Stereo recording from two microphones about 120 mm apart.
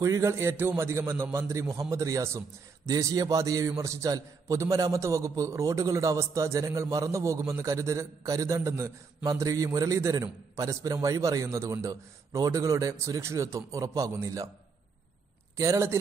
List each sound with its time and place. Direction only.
0.0 s a man's voice: 25° right (ahead or behind)
15.5 s a man's voice: 25° right (ahead or behind)